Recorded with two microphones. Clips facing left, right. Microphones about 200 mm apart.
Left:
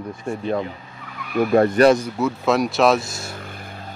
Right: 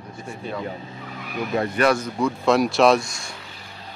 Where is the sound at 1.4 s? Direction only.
50° left (ahead or behind).